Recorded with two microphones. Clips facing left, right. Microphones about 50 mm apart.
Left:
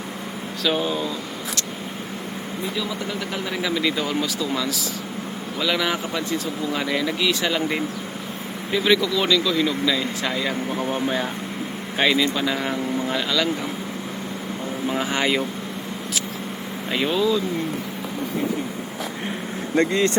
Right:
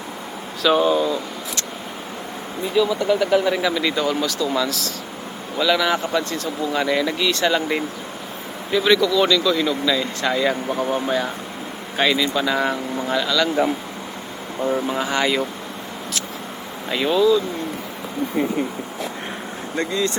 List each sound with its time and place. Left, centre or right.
0.6 s speech: centre
2.7 s speech: centre
11.9 s speech: centre
13.1 s speech: centre
14.8 s speech: centre
16.9 s speech: centre
19.7 s speech: left